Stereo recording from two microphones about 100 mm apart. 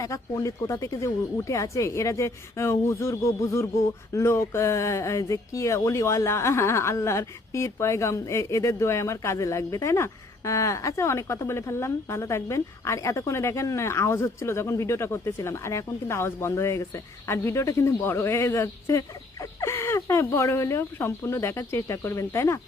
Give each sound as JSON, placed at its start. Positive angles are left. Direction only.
{"t": 0.0, "sound": "speech", "side_deg": 30}